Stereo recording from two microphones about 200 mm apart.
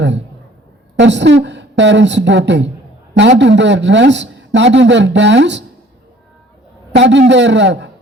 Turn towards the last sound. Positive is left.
turn(degrees=-60)  # may be behind; listen again after turning